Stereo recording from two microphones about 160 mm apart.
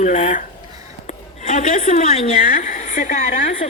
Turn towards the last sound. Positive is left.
turn(degrees=60)  # may be behind; listen again after turning